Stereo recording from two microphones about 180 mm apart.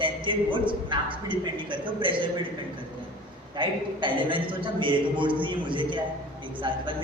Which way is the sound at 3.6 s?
30° right (ahead or behind).